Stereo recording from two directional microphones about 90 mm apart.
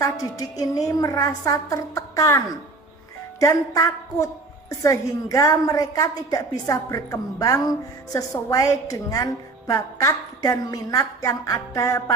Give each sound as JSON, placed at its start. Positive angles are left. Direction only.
{"t": 0.0, "sound": "a woman's voice", "side_deg": 40}
{"t": 3.4, "sound": "a woman's voice", "side_deg": 35}